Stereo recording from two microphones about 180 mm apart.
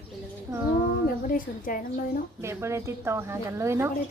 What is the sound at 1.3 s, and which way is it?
Speech, 50° left (ahead or behind).